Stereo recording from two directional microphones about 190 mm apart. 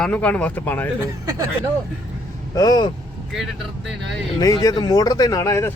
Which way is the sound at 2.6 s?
20° left (ahead or behind).